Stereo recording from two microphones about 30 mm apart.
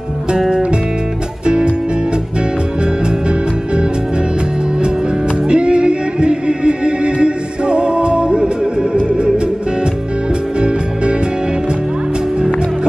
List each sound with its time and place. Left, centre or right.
1.4 s music: right
5.5 s music: right